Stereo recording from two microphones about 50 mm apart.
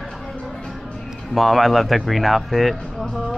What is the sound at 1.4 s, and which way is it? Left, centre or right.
Speech, centre.